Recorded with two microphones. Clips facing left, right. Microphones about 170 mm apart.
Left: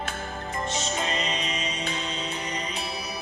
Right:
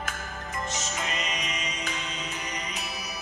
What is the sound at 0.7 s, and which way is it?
Music, 30° left (ahead or behind).